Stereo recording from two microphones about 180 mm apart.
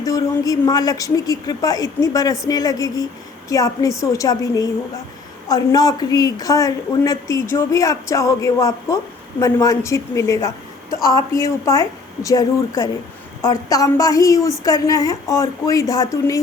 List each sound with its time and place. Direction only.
0.0 s a woman's voice: 20° left (ahead or behind)